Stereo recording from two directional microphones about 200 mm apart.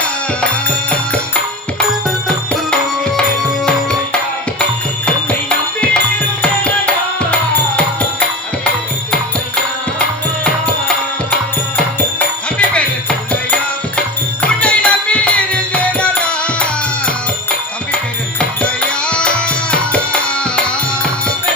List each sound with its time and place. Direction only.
2.0 s music: 5° left (ahead or behind)
5.0 s music: 5° left (ahead or behind)
10.4 s music: 5° left (ahead or behind)
12.5 s music: 5° left (ahead or behind)
14.4 s music: 5° left (ahead or behind)
17.9 s music: 5° left (ahead or behind)